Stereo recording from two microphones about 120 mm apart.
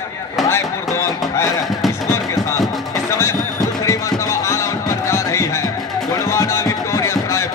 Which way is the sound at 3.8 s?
25° left (ahead or behind).